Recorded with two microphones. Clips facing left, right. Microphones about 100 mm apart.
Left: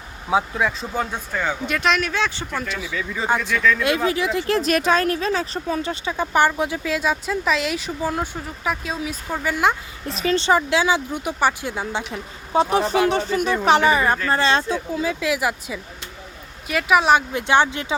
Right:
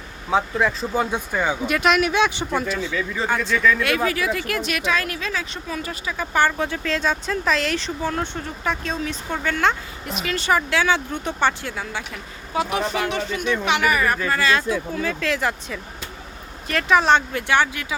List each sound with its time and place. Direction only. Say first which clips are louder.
0.3 s speech: even; 5° left (ahead or behind)
1.1 s speech: right 2 dB; 15° right (ahead or behind)
2.9 s speech: right 2 dB; centre (ahead or behind)
3.2 s speech: left 1 dB; 15° left (ahead or behind)
10.1 s speech: left 3 dB; 30° left (ahead or behind); by 11.7 s 10° left (ahead or behind)
11.7 s speech: left 4 dB; 25° left (ahead or behind)
15.0 s speech: left 2 dB; 15° left (ahead or behind)
17.3 s speech: left 2 dB; 20° left (ahead or behind)